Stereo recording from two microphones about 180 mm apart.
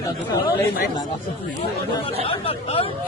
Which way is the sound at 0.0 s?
20° left (ahead or behind).